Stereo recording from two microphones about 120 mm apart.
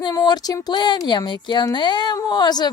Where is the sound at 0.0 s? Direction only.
35° left (ahead or behind).